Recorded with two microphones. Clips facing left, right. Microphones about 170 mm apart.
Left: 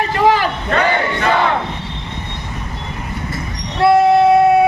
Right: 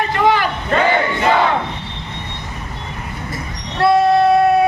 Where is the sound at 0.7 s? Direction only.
20° right (ahead or behind).